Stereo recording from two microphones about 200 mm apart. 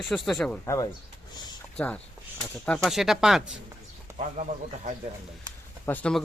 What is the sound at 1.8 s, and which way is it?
Speech, 5° left (ahead or behind).